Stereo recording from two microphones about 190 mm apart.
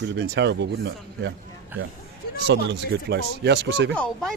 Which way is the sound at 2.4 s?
65° right (ahead or behind).